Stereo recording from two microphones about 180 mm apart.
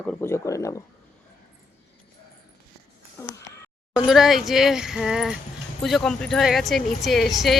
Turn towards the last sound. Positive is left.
turn(degrees=0)  # may be behind; listen again after turning